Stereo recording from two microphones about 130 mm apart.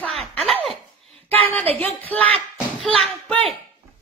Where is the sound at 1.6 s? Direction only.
50° right (ahead or behind).